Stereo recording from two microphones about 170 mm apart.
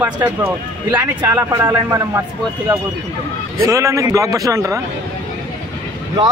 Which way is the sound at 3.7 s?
20° right (ahead or behind).